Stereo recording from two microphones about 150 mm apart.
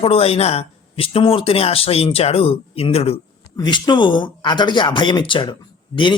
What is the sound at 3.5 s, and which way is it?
Speech, 30° left (ahead or behind).